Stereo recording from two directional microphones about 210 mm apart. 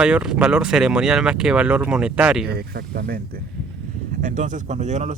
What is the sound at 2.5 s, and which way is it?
Speech, 50° right (ahead or behind).